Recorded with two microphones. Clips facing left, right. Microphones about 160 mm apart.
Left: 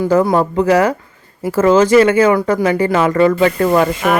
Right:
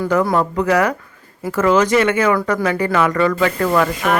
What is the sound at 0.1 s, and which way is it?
Speech, 30° left (ahead or behind).